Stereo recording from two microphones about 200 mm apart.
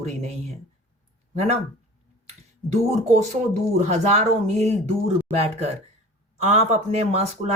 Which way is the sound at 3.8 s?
35° right (ahead or behind).